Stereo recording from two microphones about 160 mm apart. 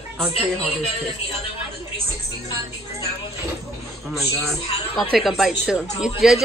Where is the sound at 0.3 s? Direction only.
40° left (ahead or behind).